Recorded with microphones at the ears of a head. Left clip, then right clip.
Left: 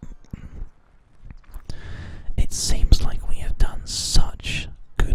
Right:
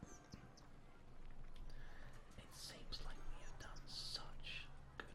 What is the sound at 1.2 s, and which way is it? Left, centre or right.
Whispering, left.